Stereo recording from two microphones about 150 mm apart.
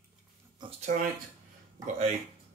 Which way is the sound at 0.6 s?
30° right (ahead or behind).